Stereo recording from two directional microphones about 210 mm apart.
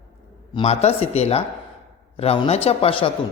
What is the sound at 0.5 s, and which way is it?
A man's voice, 30° left (ahead or behind).